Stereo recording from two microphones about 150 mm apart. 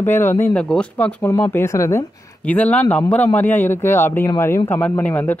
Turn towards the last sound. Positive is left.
turn(degrees=10)  # may be behind; listen again after turning